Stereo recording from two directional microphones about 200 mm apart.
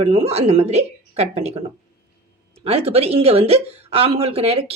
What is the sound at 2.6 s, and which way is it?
A woman's voice, 30° right (ahead or behind).